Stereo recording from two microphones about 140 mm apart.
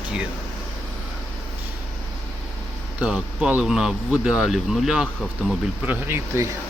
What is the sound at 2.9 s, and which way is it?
Speech, 5° right (ahead or behind).